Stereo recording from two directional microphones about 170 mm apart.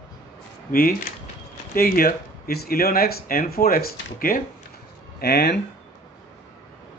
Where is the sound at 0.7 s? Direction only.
60° left (ahead or behind).